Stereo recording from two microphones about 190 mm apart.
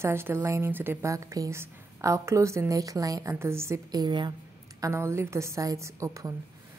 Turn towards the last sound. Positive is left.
turn(degrees=-15)  # may be behind; listen again after turning